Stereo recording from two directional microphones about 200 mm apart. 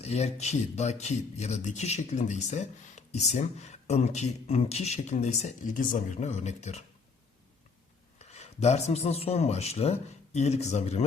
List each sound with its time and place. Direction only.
0.0 s speech: 30° left (ahead or behind)
8.2 s speech: 35° left (ahead or behind)